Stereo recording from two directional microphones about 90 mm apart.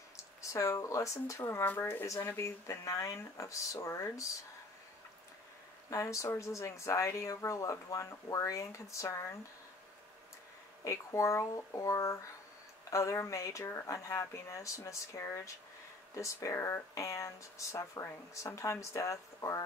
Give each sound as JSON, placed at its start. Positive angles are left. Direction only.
{"t": 0.4, "sound": "speech", "side_deg": 35}
{"t": 5.9, "sound": "speech", "side_deg": 35}
{"t": 10.8, "sound": "speech", "side_deg": 35}